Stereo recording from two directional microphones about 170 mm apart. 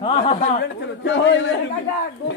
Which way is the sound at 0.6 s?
90° left.